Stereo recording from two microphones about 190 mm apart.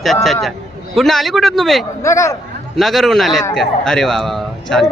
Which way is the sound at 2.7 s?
Centre (ahead or behind).